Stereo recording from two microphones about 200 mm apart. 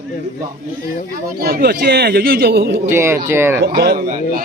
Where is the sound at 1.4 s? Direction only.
50° right (ahead or behind).